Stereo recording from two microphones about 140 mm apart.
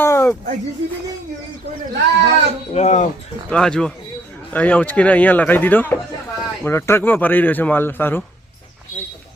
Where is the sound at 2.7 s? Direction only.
55° left (ahead or behind).